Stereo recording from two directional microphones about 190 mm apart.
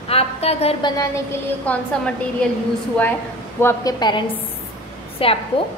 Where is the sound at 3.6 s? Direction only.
15° left (ahead or behind).